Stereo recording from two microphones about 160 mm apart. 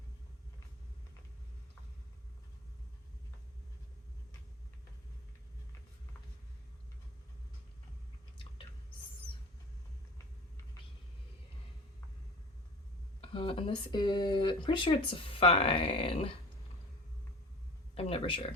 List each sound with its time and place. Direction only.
13.2 s speech: 35° left (ahead or behind)
17.9 s speech: 35° left (ahead or behind)